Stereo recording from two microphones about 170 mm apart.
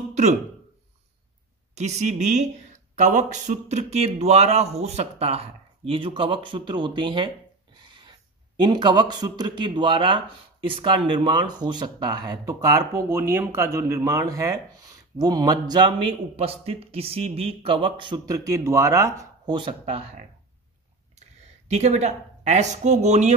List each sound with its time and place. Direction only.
0.1 s a sound: 40° right (ahead or behind)
1.8 s a man's voice: 40° right (ahead or behind)
21.6 s speech: 40° right (ahead or behind)